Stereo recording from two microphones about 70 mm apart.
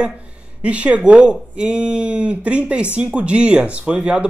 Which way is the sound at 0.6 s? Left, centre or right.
Centre.